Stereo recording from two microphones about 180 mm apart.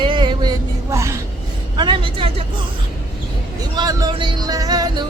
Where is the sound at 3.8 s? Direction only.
20° right (ahead or behind).